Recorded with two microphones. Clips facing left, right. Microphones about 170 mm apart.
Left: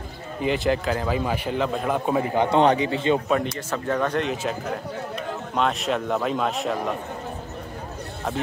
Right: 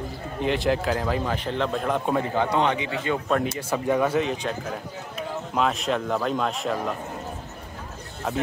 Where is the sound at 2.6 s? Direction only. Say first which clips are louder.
Left 5 dB; 35° left (ahead or behind).